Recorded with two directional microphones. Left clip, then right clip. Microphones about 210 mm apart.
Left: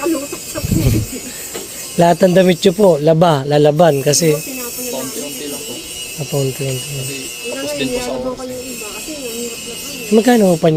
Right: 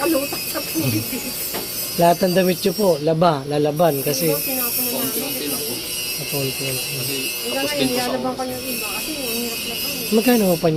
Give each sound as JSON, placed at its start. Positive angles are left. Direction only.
{"t": 2.0, "sound": "speech", "side_deg": 45}
{"t": 10.2, "sound": "speech", "side_deg": 45}